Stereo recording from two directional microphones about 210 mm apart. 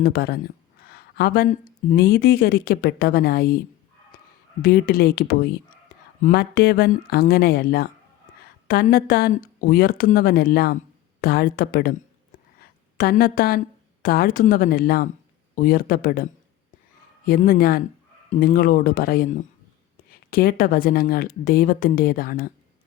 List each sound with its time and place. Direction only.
0.0 s speech: 45° left (ahead or behind)
0.9 s a sound: 50° left (ahead or behind)
1.9 s speech: 45° left (ahead or behind)
4.6 s speech: 45° left (ahead or behind)
13.0 s speech: 45° left (ahead or behind)
17.2 s speech: 45° left (ahead or behind)